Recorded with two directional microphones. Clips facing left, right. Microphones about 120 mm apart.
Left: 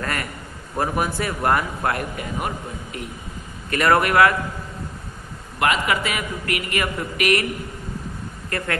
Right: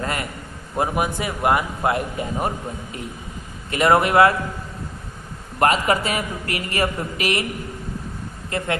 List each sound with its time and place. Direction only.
0.0 s a man's voice: 25° right (ahead or behind)
3.7 s a man's voice: 25° right (ahead or behind)
5.6 s a man's voice: 40° right (ahead or behind)
8.5 s speech: 20° right (ahead or behind)